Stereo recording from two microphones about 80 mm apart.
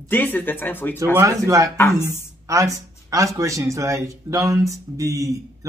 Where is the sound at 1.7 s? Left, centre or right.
Left.